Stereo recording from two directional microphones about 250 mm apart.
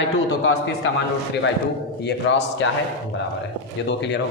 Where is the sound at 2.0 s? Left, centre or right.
Left.